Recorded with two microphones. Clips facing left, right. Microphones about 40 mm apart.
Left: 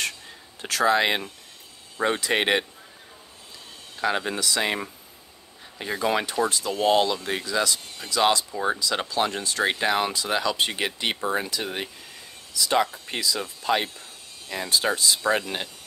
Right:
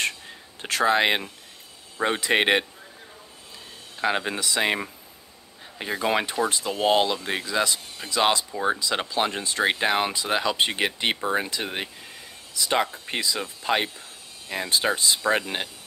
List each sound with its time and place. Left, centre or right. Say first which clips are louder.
0.6 s speech: even; right
4.0 s speech: even; centre
5.9 s speech: even; right